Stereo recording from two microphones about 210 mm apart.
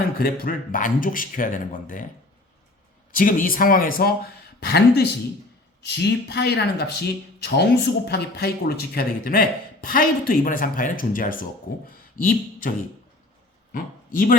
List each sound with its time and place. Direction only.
0.2 s a man's voice: 45° left (ahead or behind)
3.1 s a man's voice: 40° left (ahead or behind)
13.7 s speech: 40° left (ahead or behind)